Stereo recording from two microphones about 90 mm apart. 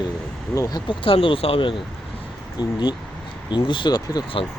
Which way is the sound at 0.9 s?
70° left (ahead or behind).